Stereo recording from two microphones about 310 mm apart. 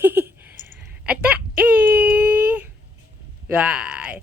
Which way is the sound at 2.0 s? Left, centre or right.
Centre.